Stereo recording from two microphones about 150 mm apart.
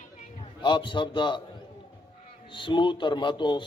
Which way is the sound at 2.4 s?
30° left (ahead or behind).